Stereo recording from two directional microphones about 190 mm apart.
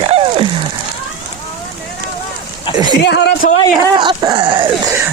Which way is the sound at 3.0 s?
60° left (ahead or behind).